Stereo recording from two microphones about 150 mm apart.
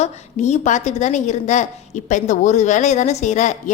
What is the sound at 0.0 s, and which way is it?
A woman's voice, 50° left (ahead or behind).